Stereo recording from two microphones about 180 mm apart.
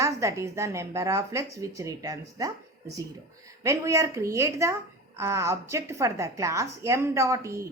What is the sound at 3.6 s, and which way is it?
A woman's voice, 15° right (ahead or behind).